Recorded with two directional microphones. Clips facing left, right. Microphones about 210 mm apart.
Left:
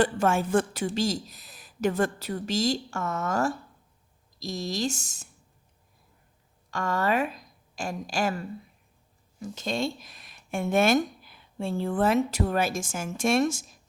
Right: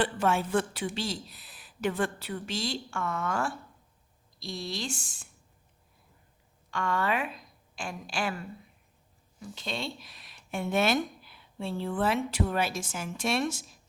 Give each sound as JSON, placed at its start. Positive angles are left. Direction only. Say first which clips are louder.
{"t": 0.0, "sound": "speech", "louder": "left 4 dB", "side_deg": 45}
{"t": 6.7, "sound": "a woman's voice", "louder": "left 3 dB", "side_deg": 40}
{"t": 9.4, "sound": "speech", "louder": "left 7 dB", "side_deg": 45}